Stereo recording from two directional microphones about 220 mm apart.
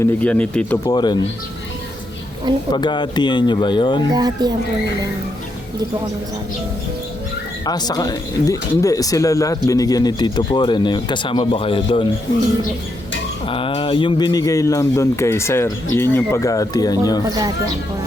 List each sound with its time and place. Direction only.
0.0 s speech: 5° left (ahead or behind)
0.9 s speech: 20° left (ahead or behind)
2.7 s speech: 20° left (ahead or behind)
4.1 s speech: 20° right (ahead or behind)
7.6 s speech: 20° left (ahead or behind)
13.5 s speech: 25° left (ahead or behind)
17.2 s speech: 15° right (ahead or behind)